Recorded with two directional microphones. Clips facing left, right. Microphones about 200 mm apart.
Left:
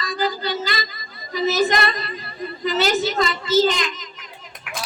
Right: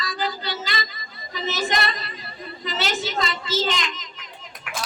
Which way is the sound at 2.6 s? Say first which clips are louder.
Left 7 dB; 40° left (ahead or behind).